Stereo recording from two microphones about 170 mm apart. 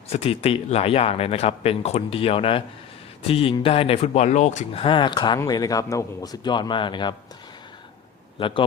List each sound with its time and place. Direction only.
0.1 s speech: 35° left (ahead or behind)
8.4 s speech: 30° left (ahead or behind)